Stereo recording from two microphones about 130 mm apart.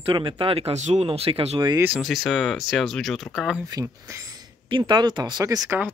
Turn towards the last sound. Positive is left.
turn(degrees=-25)  # may be behind; listen again after turning